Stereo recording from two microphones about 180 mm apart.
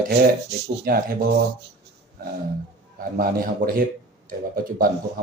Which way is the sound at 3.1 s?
50° right (ahead or behind).